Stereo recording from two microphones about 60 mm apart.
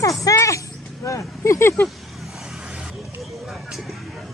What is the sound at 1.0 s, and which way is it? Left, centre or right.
Speech, left.